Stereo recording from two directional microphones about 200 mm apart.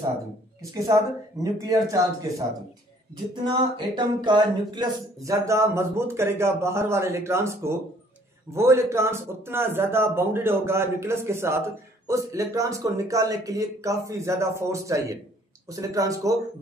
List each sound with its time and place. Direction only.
0.6 s speech: 15° right (ahead or behind)
3.4 s speech: 25° right (ahead or behind)